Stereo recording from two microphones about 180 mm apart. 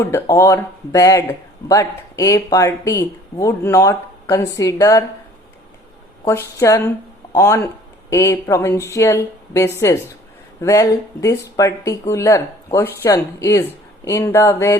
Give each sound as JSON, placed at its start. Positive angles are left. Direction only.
{"t": 0.0, "sound": "speech", "side_deg": 15}
{"t": 6.6, "sound": "speech", "side_deg": 15}